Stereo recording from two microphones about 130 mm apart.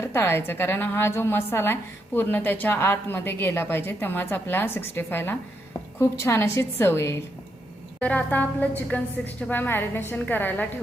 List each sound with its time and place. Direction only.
0.0 s a woman's voice: 20° left (ahead or behind)